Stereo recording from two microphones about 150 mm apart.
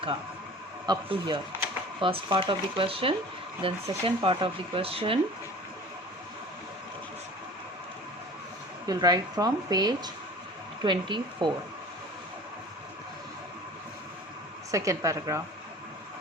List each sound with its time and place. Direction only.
0.9 s speech: 30° right (ahead or behind)
8.9 s speech: 25° right (ahead or behind)
14.7 s speech: 20° right (ahead or behind)